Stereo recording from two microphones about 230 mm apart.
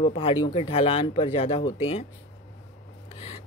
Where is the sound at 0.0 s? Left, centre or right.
Left.